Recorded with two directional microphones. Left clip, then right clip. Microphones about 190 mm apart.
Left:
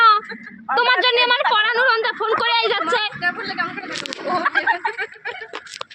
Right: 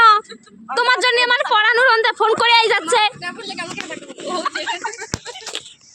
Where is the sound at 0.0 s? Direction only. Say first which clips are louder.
Right 2 dB; 40° right (ahead or behind).